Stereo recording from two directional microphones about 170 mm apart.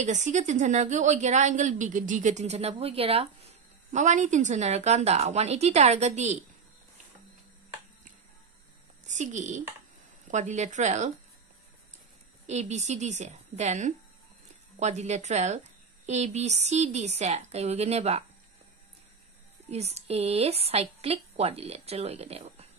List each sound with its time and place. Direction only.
0.0 s a woman's voice: 45° right (ahead or behind)
9.0 s a child's voice: 45° right (ahead or behind)
12.4 s a woman's voice: 40° right (ahead or behind)
19.7 s a woman's voice: 40° right (ahead or behind)